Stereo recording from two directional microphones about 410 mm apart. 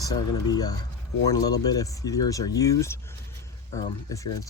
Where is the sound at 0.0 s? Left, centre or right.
Centre.